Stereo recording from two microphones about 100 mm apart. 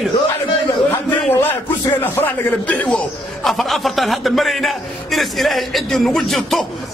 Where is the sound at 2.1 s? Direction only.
15° left (ahead or behind).